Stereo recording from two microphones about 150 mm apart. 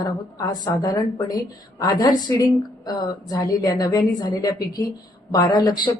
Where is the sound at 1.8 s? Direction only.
25° left (ahead or behind).